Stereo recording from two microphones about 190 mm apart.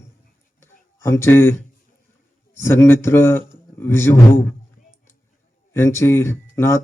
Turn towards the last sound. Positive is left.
turn(degrees=15)  # may be behind; listen again after turning